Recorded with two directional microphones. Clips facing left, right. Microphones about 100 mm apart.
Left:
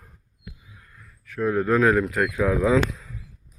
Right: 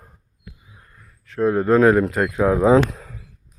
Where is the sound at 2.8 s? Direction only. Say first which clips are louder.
Right 2 dB; 55° right (ahead or behind).